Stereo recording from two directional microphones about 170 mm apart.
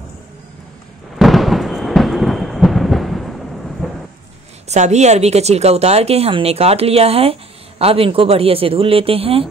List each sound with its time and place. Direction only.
1.1 s thunder: centre (ahead or behind)
4.6 s speech: 45° right (ahead or behind)